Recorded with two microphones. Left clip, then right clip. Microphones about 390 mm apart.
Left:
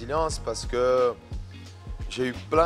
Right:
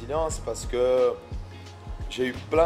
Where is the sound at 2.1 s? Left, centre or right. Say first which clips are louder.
Even; left.